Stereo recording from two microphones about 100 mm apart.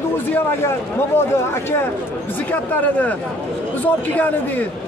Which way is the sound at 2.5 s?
15° left (ahead or behind).